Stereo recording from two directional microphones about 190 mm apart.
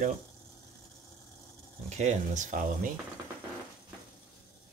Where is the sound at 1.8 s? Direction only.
40° right (ahead or behind).